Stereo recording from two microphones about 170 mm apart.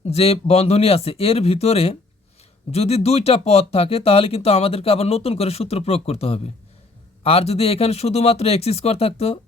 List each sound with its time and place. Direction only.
0.1 s speech: 35° left (ahead or behind)